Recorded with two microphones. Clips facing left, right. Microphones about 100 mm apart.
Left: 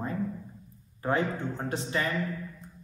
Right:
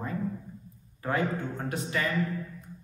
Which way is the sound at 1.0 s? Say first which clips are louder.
Left 1 dB; 25° left (ahead or behind).